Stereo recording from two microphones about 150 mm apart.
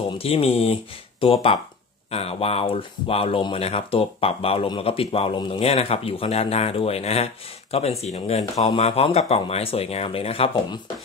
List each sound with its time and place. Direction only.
0.2 s speech: 40° left (ahead or behind)